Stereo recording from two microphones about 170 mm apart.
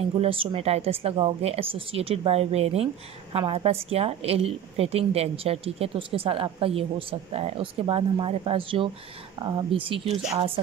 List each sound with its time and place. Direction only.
0.2 s a woman's voice: 30° right (ahead or behind)